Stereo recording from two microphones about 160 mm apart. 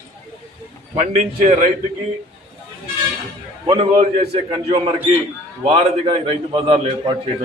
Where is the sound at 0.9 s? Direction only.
45° right (ahead or behind).